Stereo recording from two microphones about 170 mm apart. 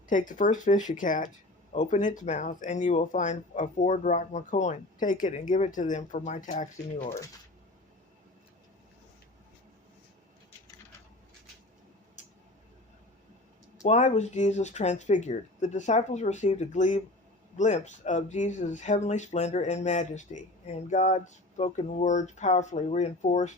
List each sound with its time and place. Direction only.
0.1 s speech: 50° left (ahead or behind)
13.8 s speech: 40° left (ahead or behind)